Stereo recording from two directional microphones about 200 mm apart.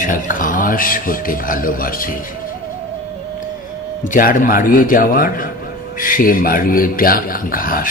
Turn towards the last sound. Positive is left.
turn(degrees=45)  # may be behind; listen again after turning